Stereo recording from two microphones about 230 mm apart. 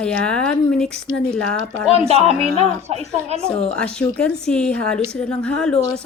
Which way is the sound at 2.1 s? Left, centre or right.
Right.